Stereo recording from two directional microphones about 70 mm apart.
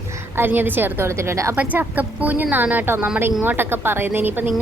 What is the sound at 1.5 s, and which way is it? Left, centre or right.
A woman's voice, right.